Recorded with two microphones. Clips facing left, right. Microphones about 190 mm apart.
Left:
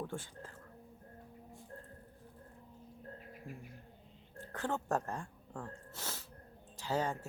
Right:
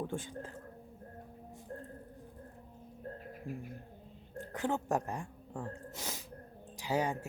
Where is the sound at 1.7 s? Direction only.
45° right (ahead or behind).